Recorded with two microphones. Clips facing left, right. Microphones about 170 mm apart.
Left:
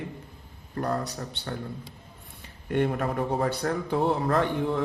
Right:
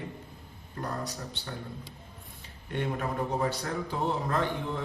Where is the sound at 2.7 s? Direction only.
55° left (ahead or behind).